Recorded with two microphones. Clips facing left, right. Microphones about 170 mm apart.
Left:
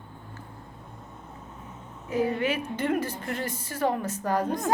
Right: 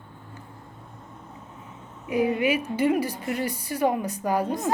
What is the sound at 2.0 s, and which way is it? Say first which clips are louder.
A woman's voice: right 3 dB; 10° right (ahead or behind).